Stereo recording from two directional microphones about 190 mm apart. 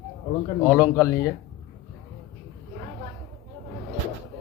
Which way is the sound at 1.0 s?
15° left (ahead or behind).